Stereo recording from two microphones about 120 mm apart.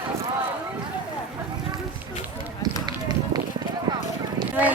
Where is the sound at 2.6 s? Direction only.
35° right (ahead or behind).